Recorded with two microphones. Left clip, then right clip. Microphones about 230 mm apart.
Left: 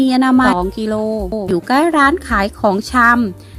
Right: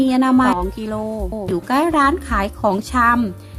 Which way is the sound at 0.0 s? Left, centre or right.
Centre.